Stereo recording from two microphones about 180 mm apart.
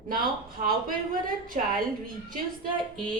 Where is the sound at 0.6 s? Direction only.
50° right (ahead or behind).